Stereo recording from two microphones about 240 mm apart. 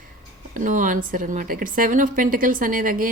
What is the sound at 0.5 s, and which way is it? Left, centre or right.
A woman's voice, right.